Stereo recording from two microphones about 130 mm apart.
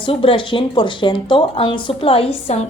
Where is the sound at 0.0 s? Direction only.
45° left (ahead or behind).